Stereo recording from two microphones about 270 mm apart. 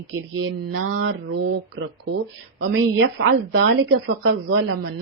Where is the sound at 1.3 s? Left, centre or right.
Right.